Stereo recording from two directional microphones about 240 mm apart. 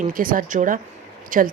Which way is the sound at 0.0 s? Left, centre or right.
Right.